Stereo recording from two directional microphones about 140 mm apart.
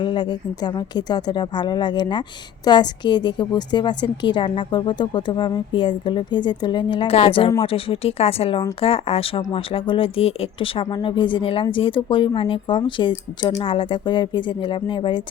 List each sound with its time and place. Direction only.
0.0 s speech: 35° left (ahead or behind)